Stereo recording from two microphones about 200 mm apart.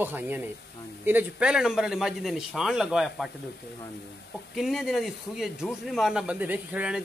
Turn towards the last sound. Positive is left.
turn(degrees=-5)  # may be behind; listen again after turning